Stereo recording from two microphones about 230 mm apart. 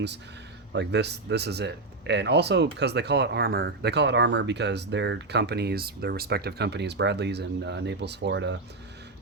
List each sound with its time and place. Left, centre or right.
0.7 s speech: right